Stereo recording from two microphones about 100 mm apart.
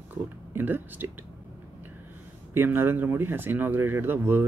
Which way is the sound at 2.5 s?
20° right (ahead or behind).